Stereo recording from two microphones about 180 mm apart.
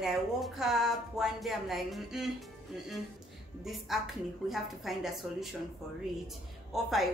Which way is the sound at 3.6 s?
Centre (ahead or behind).